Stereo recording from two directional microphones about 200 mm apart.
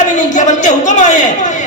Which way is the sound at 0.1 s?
40° left (ahead or behind).